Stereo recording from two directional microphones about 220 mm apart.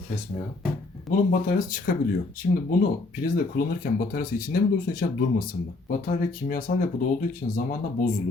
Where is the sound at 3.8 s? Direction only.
40° left (ahead or behind).